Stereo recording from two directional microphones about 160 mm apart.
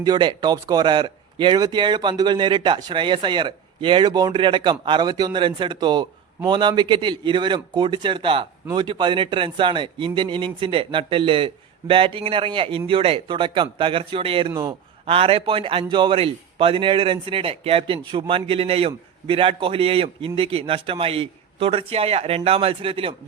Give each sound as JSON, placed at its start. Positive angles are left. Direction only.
{"t": 0.0, "sound": "a man's voice", "side_deg": -25}
{"t": 14.5, "sound": "speech", "side_deg": -20}
{"t": 15.0, "sound": "a man's voice", "side_deg": -35}